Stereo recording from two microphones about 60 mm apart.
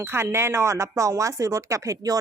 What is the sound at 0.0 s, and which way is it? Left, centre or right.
Speech, right.